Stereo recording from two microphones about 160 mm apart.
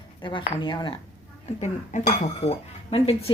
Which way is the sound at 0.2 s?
30° left (ahead or behind).